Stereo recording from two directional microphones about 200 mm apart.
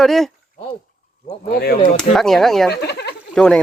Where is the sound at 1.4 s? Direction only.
50° left (ahead or behind).